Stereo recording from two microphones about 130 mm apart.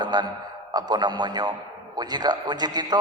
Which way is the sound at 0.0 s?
35° right (ahead or behind).